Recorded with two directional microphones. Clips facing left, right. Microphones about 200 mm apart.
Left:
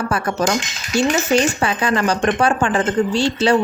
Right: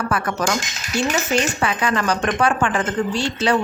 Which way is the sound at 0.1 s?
30° left (ahead or behind).